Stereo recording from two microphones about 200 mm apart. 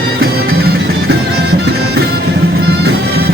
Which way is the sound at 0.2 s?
50° right (ahead or behind).